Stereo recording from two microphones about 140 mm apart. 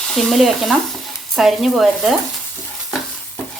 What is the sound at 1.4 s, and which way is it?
Speech, centre (ahead or behind).